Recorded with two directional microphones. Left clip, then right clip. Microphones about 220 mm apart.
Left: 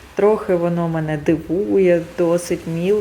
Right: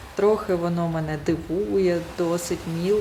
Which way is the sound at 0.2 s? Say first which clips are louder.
Left 5 dB; 10° left (ahead or behind).